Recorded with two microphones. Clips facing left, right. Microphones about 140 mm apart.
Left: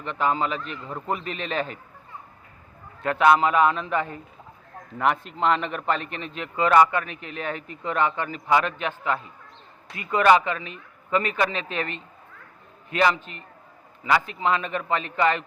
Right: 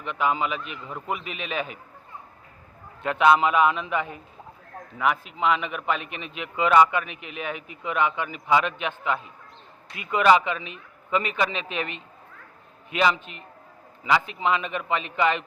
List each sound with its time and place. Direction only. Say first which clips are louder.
0.0 s a man's voice: left 1 dB; 10° right (ahead or behind)
3.0 s a man's voice: left 1 dB; 20° right (ahead or behind)
4.9 s a man's voice: left 1 dB; 5° right (ahead or behind)